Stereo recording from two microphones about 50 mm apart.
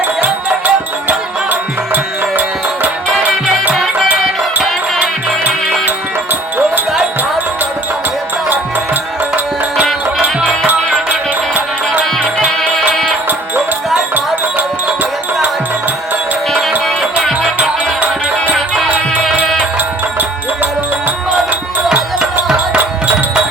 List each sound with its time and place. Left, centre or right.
0.2 s music: right
4.1 s music: right
11.5 s music: right
17.6 s music: right
18.5 s music: centre